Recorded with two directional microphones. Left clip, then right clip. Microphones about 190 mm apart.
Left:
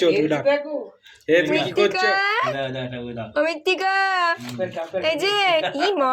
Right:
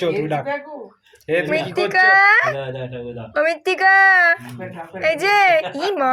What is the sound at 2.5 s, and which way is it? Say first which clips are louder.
Speech: even; 45° left (ahead or behind).